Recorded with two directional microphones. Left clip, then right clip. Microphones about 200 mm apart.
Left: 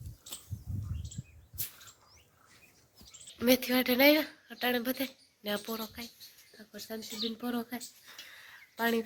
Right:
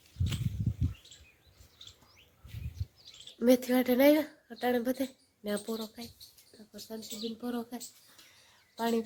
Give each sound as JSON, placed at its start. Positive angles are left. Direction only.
{"t": 3.3, "sound": "speech", "side_deg": -30}
{"t": 6.7, "sound": "speech", "side_deg": 5}
{"t": 8.7, "sound": "a sound", "side_deg": 0}